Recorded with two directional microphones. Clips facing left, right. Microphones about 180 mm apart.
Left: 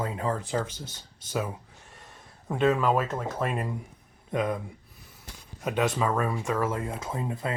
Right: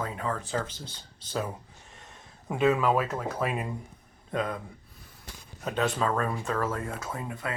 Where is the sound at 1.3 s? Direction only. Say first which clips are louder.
Left 1 dB; 10° left (ahead or behind).